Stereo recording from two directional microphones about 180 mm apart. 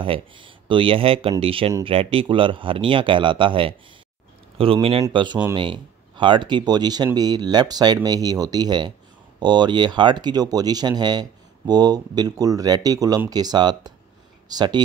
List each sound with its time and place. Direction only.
0.0 s speech: 30° right (ahead or behind)